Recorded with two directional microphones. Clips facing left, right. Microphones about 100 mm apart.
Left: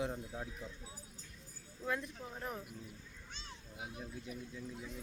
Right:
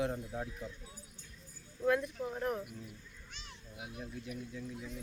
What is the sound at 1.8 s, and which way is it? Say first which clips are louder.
Speech: right 8 dB; 5° right (ahead or behind).